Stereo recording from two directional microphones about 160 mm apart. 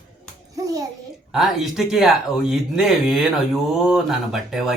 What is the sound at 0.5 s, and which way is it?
Music, 20° right (ahead or behind).